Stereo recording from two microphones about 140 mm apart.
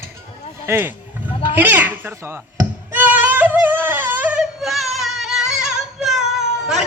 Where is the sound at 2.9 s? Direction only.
10° right (ahead or behind).